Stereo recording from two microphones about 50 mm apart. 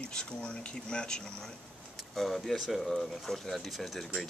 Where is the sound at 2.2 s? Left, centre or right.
Centre.